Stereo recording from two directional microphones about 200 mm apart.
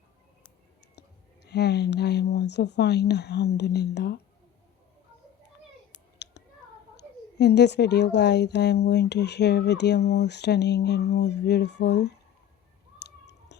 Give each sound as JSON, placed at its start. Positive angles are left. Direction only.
{"t": 1.5, "sound": "a woman's voice", "side_deg": 55}
{"t": 6.2, "sound": "a sound", "side_deg": 60}
{"t": 6.9, "sound": "a woman's voice", "side_deg": 55}
{"t": 13.0, "sound": "clicking", "side_deg": 60}